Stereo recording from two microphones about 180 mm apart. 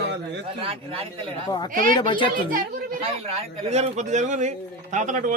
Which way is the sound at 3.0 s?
35° right (ahead or behind).